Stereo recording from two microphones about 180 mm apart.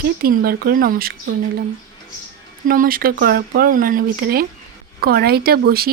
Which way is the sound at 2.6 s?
50° right (ahead or behind).